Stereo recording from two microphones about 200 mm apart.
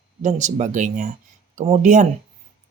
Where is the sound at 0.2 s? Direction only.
35° right (ahead or behind).